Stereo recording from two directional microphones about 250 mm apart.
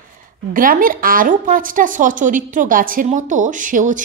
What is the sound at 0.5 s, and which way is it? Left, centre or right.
A woman's voice, right.